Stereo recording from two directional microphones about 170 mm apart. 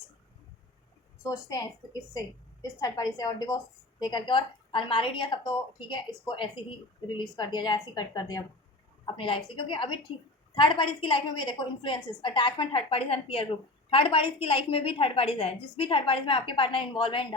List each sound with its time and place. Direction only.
1.2 s a woman's voice: 20° left (ahead or behind)